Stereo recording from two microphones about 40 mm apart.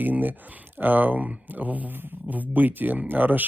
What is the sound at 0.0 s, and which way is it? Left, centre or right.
Speech, right.